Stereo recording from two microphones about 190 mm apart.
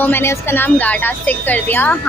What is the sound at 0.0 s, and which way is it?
A woman's voice, 10° left (ahead or behind).